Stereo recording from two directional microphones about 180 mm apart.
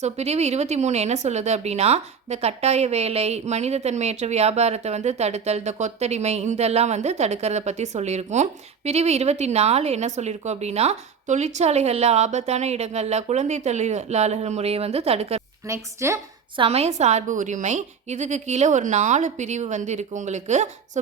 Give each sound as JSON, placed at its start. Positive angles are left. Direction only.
{"t": 0.0, "sound": "speech", "side_deg": -35}
{"t": 15.6, "sound": "a woman's voice", "side_deg": -15}
{"t": 16.6, "sound": "speech", "side_deg": -35}